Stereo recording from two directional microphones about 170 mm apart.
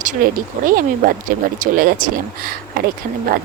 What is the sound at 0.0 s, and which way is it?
Speech, 50° right (ahead or behind).